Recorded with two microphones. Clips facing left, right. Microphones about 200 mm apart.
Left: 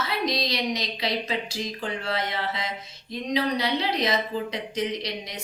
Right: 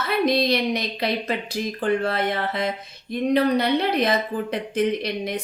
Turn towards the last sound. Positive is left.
turn(degrees=-55)  # may be behind; listen again after turning